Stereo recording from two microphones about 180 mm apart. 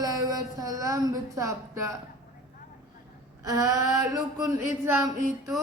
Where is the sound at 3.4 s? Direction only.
20° right (ahead or behind).